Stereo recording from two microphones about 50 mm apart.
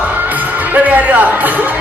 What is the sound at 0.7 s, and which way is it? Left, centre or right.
Speech, right.